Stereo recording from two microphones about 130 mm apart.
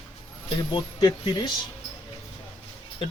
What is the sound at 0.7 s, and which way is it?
Speech, 35° left (ahead or behind).